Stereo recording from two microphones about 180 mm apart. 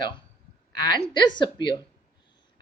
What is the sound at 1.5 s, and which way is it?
Speech, 25° left (ahead or behind).